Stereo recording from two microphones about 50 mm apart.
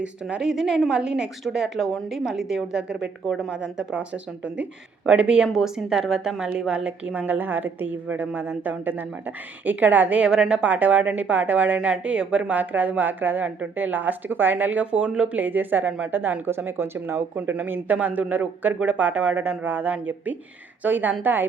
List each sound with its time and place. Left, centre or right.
0.0 s speech: right
0.4 s a woman's voice: centre
3.8 s speech: right
5.5 s a woman's voice: centre; by 7.3 s right
7.3 s speech: right
10.2 s speech: centre
10.7 s speech: right
11.9 s speech: centre
15.4 s speech: right
17.2 s speech: right